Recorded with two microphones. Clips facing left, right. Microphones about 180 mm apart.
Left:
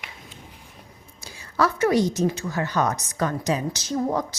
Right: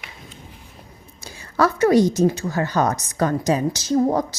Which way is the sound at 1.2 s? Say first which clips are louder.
Right 3 dB; 45° right (ahead or behind).